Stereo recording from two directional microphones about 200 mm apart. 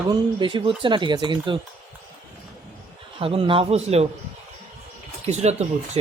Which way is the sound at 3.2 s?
25° right (ahead or behind).